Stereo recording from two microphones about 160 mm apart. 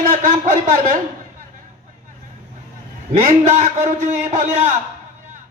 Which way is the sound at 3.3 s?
50° right (ahead or behind).